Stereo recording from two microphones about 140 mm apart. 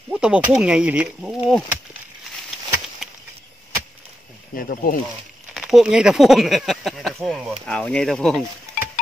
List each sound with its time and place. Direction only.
0.1 s speech: 5° right (ahead or behind)
4.6 s speech: 90° left
5.5 s speech: 5° right (ahead or behind)